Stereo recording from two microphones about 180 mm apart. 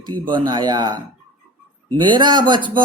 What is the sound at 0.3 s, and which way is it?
Speech, 25° right (ahead or behind).